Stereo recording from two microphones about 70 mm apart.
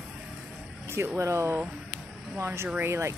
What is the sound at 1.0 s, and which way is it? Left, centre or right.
Speech, right.